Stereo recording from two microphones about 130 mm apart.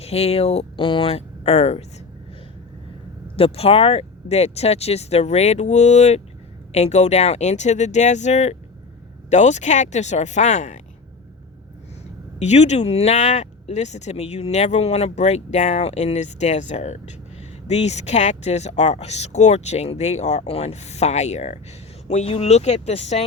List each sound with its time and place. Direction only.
0.0 s speech: 50° left (ahead or behind)
3.3 s speech: 50° left (ahead or behind); by 10.8 s 70° left (ahead or behind)
12.4 s speech: 60° left (ahead or behind)